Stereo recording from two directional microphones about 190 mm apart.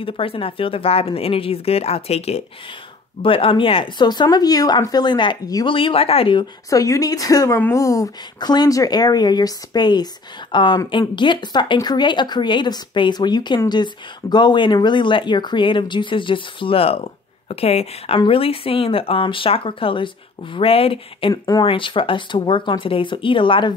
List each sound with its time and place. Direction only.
0.0 s speech: 30° left (ahead or behind)